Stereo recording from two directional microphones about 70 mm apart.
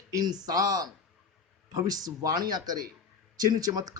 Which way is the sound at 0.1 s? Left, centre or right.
Right.